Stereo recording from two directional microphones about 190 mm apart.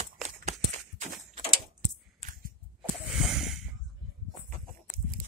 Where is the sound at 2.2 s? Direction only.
45° right (ahead or behind).